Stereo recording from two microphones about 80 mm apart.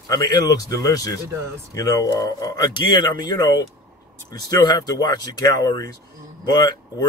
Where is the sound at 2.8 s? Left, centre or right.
Left.